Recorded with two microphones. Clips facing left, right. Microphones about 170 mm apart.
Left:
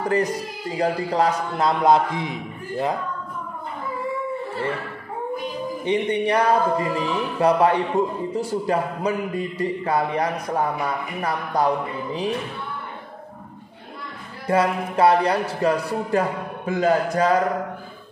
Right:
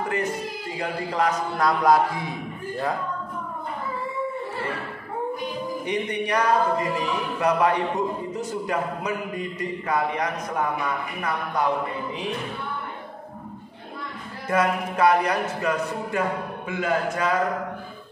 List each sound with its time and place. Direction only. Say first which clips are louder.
0.1 s a man's voice: left 4 dB; 35° left (ahead or behind)
5.9 s a man's voice: left 6 dB; 30° left (ahead or behind)
14.5 s a man's voice: left 2 dB; 30° left (ahead or behind)